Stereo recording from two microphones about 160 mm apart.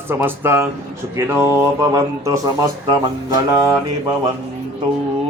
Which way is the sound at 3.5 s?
20° right (ahead or behind).